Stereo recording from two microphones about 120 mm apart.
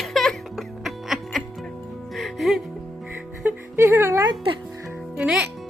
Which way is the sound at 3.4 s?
20° right (ahead or behind).